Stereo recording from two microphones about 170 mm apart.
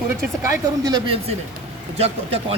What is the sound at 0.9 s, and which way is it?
Speech, 25° right (ahead or behind).